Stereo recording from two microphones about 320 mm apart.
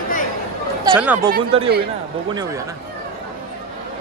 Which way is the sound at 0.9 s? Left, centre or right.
Centre.